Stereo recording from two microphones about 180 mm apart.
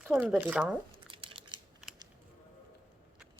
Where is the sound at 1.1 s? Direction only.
30° right (ahead or behind).